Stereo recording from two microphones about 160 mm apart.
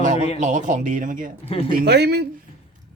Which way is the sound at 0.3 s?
50° right (ahead or behind).